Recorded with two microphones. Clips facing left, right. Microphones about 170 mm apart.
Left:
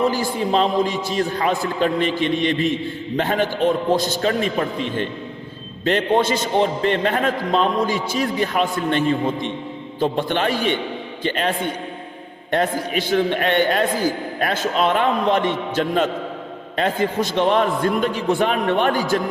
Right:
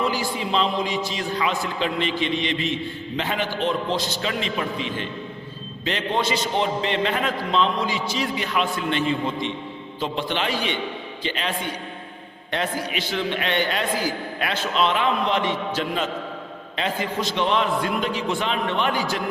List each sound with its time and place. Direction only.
0.0 s a man's voice: 50° left (ahead or behind)